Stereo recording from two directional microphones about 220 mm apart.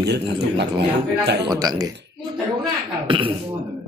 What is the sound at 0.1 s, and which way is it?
Speech, 50° right (ahead or behind).